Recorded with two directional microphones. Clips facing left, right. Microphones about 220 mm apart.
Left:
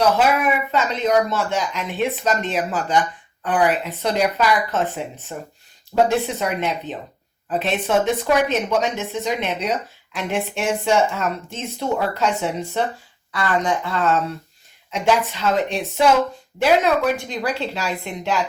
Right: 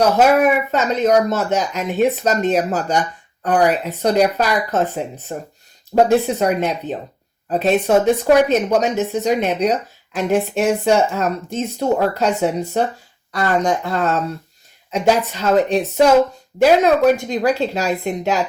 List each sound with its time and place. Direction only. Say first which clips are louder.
0.7 s speech: right 4 dB; 45° right (ahead or behind)